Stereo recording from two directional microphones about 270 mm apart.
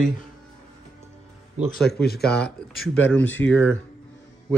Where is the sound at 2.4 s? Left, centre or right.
Centre.